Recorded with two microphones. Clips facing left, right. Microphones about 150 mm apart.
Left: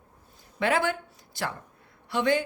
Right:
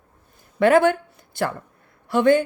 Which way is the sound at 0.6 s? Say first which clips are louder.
Right 10 dB; 55° right (ahead or behind).